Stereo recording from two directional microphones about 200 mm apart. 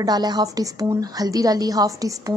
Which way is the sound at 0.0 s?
20° right (ahead or behind).